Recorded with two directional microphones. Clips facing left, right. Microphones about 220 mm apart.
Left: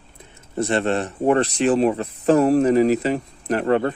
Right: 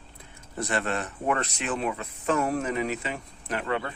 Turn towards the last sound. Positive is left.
turn(degrees=45)  # may be behind; listen again after turning